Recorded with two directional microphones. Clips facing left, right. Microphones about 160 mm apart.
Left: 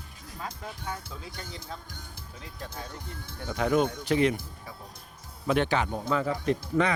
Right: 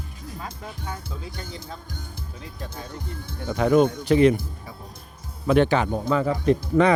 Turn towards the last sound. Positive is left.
turn(degrees=-30)  # may be behind; listen again after turning